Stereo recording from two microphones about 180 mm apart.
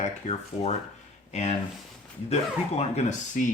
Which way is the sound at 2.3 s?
35° left (ahead or behind).